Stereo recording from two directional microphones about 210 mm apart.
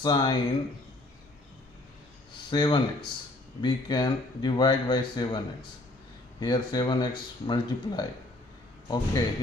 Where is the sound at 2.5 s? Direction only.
20° left (ahead or behind).